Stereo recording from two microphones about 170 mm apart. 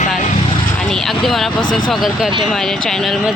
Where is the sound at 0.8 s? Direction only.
5° left (ahead or behind).